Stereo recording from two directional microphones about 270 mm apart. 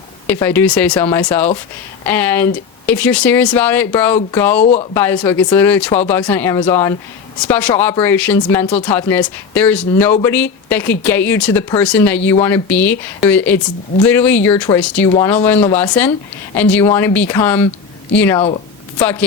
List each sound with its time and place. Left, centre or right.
0.3 s speech: centre
4.6 s speech: left
4.9 s speech: centre
18.3 s speech: left
18.9 s speech: centre